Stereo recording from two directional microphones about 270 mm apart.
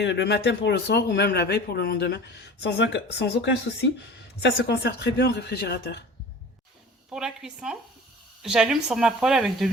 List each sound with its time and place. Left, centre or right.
0.0 s speech: left
7.1 s speech: centre